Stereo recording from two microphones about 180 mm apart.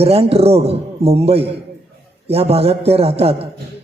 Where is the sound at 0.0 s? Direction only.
35° right (ahead or behind).